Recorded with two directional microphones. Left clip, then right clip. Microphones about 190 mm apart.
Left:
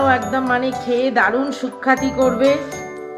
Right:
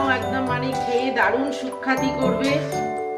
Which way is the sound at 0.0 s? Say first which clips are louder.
Left 5 dB; 60° left (ahead or behind).